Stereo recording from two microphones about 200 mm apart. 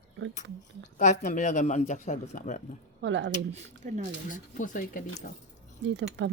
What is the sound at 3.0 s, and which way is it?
Speech, 65° right (ahead or behind).